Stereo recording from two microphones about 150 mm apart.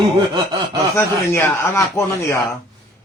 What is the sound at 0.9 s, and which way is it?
A man's voice, 15° left (ahead or behind).